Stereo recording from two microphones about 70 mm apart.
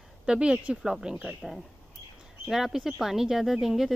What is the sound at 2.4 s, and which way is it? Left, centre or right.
Speech, centre.